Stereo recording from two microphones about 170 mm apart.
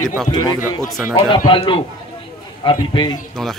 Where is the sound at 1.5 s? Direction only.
30° left (ahead or behind).